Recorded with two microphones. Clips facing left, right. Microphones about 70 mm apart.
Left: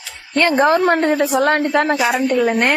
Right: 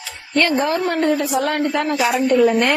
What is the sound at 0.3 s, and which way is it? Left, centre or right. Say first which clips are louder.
Speech: left 4 dB; left.